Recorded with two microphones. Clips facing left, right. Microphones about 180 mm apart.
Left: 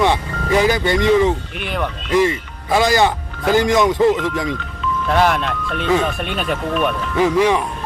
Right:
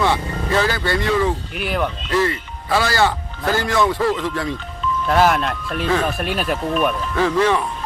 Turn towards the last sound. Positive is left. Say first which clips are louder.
# left 2 dB
turn(degrees=15)  # may be behind; listen again after turning